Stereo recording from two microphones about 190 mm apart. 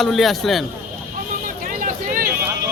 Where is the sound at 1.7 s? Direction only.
50° right (ahead or behind).